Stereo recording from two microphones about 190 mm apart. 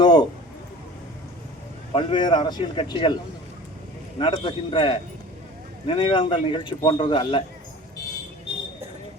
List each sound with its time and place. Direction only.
0.0 s a sound: 20° left (ahead or behind)
1.9 s speech: 25° left (ahead or behind)
4.2 s speech: 25° left (ahead or behind)